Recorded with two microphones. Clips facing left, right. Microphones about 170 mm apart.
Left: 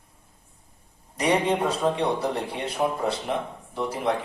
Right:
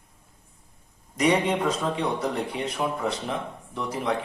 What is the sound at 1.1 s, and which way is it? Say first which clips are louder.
A man's voice: even; 30° left (ahead or behind).